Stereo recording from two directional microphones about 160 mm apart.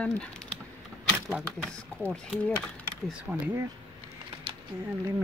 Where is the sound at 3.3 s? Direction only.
10° right (ahead or behind).